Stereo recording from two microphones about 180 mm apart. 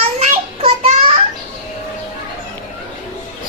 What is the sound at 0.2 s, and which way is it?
Child singing, 35° right (ahead or behind).